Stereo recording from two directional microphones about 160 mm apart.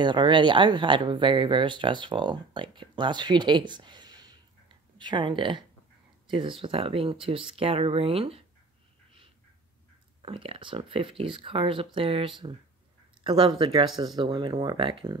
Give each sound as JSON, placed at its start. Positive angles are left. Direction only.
{"t": 0.0, "sound": "speech", "side_deg": -30}
{"t": 10.2, "sound": "speech", "side_deg": -35}
{"t": 13.8, "sound": "speech", "side_deg": 0}
{"t": 14.1, "sound": "speech", "side_deg": -30}